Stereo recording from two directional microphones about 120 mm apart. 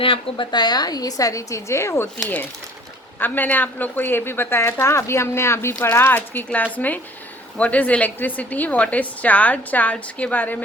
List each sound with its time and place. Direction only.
0.0 s a woman's voice: 45° left (ahead or behind); by 2.0 s 20° left (ahead or behind)
3.2 s a woman's voice: 15° left (ahead or behind)